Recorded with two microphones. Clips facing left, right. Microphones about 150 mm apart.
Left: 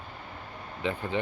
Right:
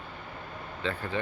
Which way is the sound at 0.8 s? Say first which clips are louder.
Left 2 dB; 15° left (ahead or behind).